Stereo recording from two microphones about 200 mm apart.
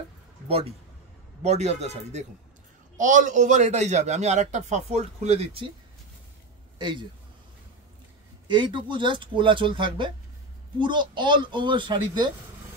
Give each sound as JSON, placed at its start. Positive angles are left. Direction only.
{"t": 0.5, "sound": "a man's voice", "side_deg": -30}
{"t": 6.8, "sound": "speech", "side_deg": -25}
{"t": 8.5, "sound": "speech", "side_deg": -25}